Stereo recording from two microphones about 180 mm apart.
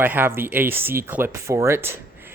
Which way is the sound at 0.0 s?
10° right (ahead or behind).